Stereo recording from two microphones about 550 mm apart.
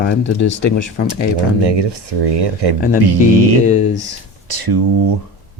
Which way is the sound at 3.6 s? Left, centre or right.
Centre.